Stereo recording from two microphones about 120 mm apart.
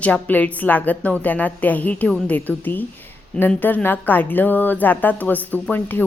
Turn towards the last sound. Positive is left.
turn(degrees=15)  # may be behind; listen again after turning